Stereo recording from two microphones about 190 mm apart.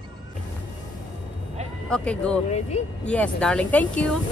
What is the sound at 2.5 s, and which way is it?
Speech, 35° left (ahead or behind).